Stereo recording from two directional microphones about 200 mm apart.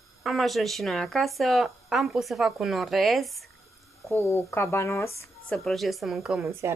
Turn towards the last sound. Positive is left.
turn(degrees=-15)  # may be behind; listen again after turning